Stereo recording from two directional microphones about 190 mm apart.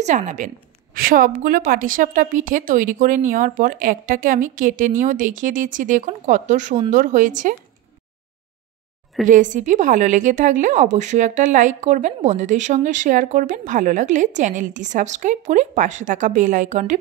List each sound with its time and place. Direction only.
0.0 s a woman's voice: 40° right (ahead or behind)
9.2 s a woman's voice: 40° right (ahead or behind)